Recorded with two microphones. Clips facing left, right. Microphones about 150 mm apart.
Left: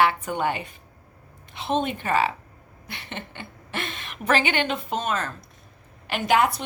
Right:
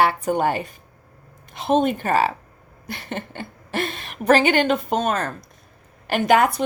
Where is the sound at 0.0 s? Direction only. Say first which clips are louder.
Right 3 dB; 40° right (ahead or behind).